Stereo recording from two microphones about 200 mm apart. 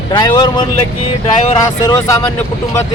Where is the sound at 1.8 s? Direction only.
20° left (ahead or behind).